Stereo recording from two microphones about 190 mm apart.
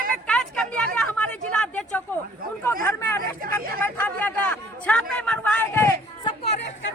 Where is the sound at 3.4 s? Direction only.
50° right (ahead or behind).